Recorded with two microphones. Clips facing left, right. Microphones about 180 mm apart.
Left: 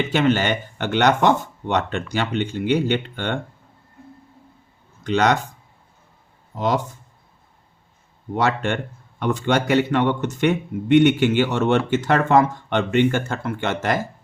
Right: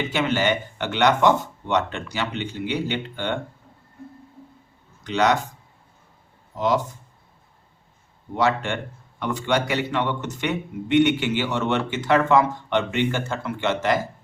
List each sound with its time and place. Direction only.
0.1 s a man's voice: 50° left (ahead or behind)
5.0 s a man's voice: 50° left (ahead or behind)
8.4 s a man's voice: 50° left (ahead or behind)